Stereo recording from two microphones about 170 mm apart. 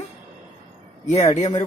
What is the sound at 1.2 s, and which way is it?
Speech, 45° left (ahead or behind).